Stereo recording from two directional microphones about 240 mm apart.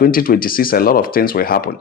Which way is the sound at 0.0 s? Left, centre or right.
Left.